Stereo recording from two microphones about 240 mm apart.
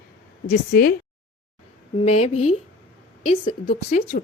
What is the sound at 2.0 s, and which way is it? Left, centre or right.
Speech, left.